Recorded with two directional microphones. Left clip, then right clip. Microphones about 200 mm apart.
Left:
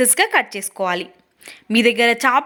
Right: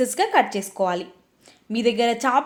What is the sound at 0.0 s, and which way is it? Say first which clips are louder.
A woman's voice: left 3 dB; 20° left (ahead or behind).